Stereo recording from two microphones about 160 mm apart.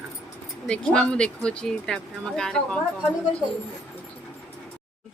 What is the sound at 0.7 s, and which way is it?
Speech, 5° left (ahead or behind).